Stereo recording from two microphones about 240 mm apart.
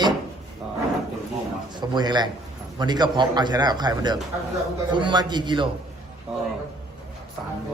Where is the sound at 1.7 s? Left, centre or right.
Centre.